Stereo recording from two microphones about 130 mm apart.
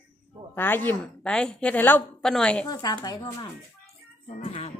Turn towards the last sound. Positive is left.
turn(degrees=50)  # may be behind; listen again after turning